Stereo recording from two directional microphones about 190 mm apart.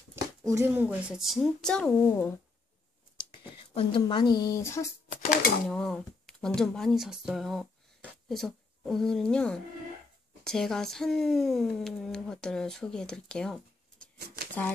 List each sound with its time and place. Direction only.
0.1 s a sound: 15° right (ahead or behind)
0.8 s speech: 5° right (ahead or behind); by 2.3 s 10° left (ahead or behind)
3.5 s speech: 30° left (ahead or behind)
5.1 s speech: 45° left (ahead or behind)
5.7 s speech: centre (ahead or behind)
14.2 s speech: 55° right (ahead or behind)